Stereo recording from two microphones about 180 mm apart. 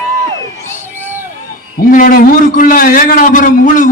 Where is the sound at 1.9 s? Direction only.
50° left (ahead or behind).